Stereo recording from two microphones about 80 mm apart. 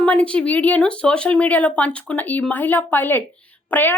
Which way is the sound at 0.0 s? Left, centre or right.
Centre.